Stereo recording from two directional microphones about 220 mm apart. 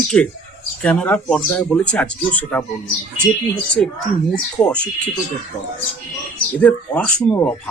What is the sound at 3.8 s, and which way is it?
Speech, 5° left (ahead or behind).